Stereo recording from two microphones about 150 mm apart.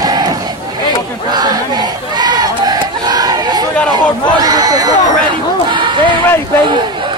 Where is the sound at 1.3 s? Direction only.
25° right (ahead or behind).